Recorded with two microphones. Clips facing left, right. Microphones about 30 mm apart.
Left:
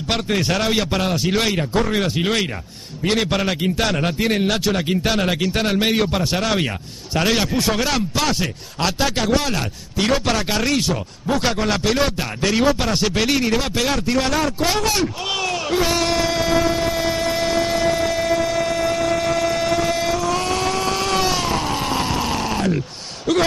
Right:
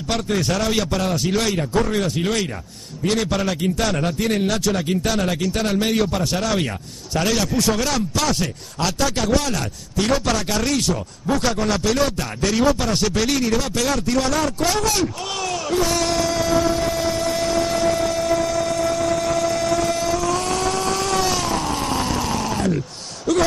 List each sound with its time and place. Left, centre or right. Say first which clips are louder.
0.1 s a man's voice: left 1 dB; left
1.1 s speech: left 1 dB; centre
1.4 s a man's voice: left 1 dB; left
15.8 s music: left 1 dB; left
16.9 s vehicle: left 1 dB; left
19.5 s vehicle: left 1 dB; left
21.3 s a sound: left 1 dB; centre